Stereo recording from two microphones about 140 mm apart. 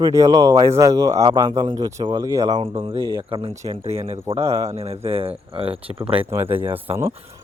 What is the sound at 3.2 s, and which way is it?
Speech, 40° right (ahead or behind).